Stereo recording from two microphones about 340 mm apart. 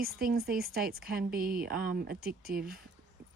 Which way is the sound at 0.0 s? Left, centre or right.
Right.